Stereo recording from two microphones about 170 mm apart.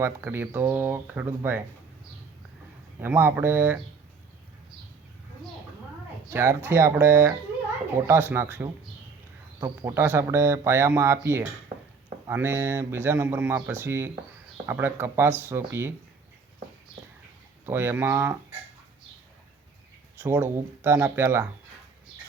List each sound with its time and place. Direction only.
0.0 s speech: 15° right (ahead or behind)
3.0 s speech: 15° right (ahead or behind)
6.3 s speech: 15° right (ahead or behind)
17.7 s speech: 15° right (ahead or behind)
20.2 s speech: 15° right (ahead or behind)